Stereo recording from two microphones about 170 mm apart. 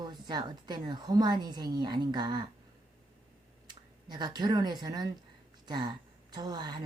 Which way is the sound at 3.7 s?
25° right (ahead or behind).